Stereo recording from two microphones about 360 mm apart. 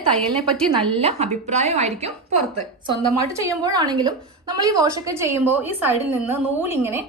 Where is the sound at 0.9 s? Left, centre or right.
Centre.